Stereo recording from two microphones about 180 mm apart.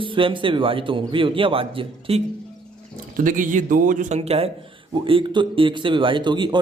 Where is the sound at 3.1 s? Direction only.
50° right (ahead or behind); by 6.5 s 25° right (ahead or behind).